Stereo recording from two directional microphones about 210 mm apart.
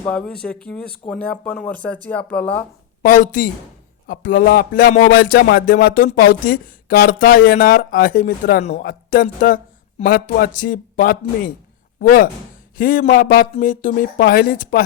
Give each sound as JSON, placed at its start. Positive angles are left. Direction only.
{"t": 0.1, "sound": "speech", "side_deg": 5}
{"t": 3.0, "sound": "speech", "side_deg": 40}
{"t": 4.9, "sound": "music", "side_deg": 50}
{"t": 8.8, "sound": "speech", "side_deg": 40}
{"t": 10.0, "sound": "music", "side_deg": 45}
{"t": 12.7, "sound": "speech", "side_deg": 40}